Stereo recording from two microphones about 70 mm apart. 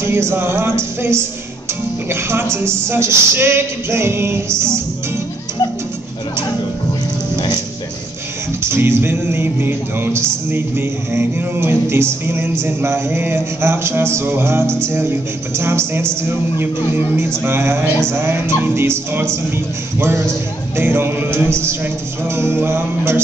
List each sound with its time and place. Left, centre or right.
0.1 s music: right
7.3 s music: left
8.6 s music: right